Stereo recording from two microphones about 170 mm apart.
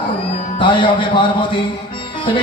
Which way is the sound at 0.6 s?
30° left (ahead or behind).